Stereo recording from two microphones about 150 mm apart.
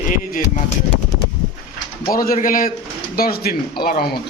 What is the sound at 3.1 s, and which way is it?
Speech, 90° left.